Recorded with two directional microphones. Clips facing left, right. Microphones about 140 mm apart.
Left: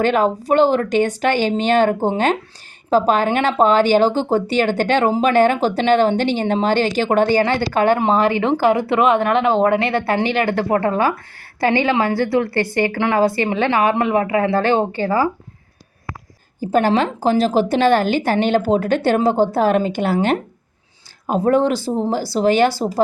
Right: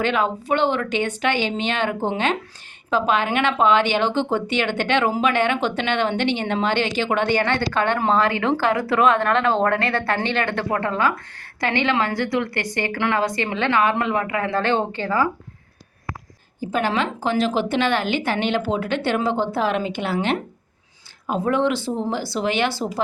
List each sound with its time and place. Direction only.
0.0 s a woman's voice: 40° left (ahead or behind)
7.9 s speech: 25° left (ahead or behind)
9.3 s speech: 5° left (ahead or behind)
9.7 s a woman's voice: 25° left (ahead or behind)
16.6 s a woman's voice: 40° left (ahead or behind)